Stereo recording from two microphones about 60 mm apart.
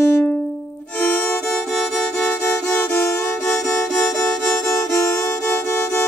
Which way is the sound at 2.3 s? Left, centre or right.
Left.